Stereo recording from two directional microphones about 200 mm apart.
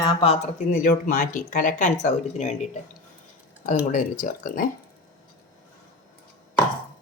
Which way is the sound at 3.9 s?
40° left (ahead or behind).